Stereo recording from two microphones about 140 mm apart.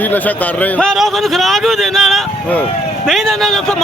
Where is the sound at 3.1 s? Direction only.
Centre (ahead or behind).